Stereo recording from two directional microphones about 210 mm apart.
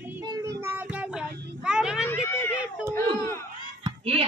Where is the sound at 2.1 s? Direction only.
10° left (ahead or behind).